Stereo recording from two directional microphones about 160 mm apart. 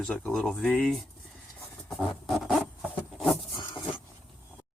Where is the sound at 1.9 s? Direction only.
Centre (ahead or behind).